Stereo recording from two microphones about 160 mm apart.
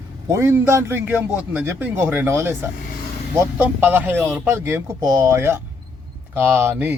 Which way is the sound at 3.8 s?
10° right (ahead or behind).